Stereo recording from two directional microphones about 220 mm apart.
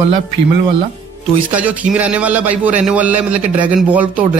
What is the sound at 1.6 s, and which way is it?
A man's voice, 5° right (ahead or behind).